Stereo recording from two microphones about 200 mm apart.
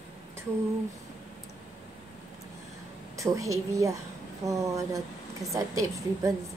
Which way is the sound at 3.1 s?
15° right (ahead or behind).